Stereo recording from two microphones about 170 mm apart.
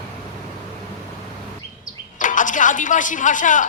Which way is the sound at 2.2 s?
50° left (ahead or behind).